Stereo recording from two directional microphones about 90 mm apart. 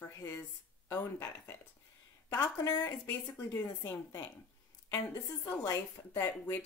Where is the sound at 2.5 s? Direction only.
40° left (ahead or behind).